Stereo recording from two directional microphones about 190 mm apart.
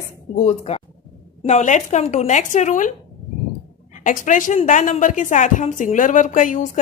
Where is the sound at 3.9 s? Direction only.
40° left (ahead or behind).